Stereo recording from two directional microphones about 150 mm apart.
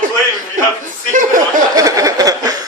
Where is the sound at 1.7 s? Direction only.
20° right (ahead or behind).